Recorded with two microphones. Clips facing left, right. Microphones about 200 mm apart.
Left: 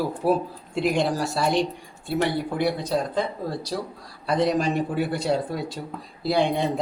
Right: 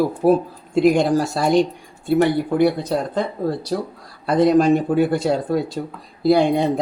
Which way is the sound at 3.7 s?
55° right (ahead or behind).